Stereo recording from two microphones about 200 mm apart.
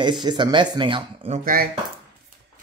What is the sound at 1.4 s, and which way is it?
Speech, 45° right (ahead or behind).